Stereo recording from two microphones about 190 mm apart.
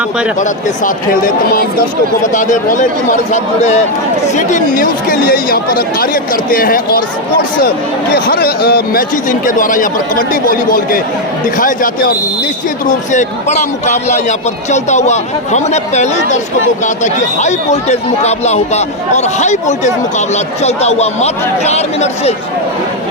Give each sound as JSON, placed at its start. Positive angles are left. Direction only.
{"t": 0.3, "sound": "speech", "side_deg": 45}